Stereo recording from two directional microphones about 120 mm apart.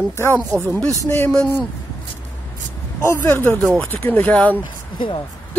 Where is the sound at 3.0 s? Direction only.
20° left (ahead or behind).